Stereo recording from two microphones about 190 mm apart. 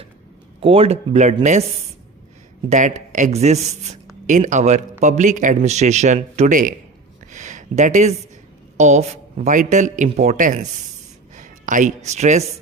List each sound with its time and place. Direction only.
0.6 s a man's voice: 30° right (ahead or behind)
2.6 s a man's voice: 40° right (ahead or behind)
7.3 s a sound: 40° right (ahead or behind)
8.8 s a man's voice: 35° right (ahead or behind)